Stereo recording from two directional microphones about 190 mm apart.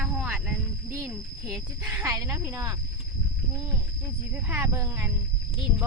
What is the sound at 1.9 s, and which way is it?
Speech, 15° right (ahead or behind).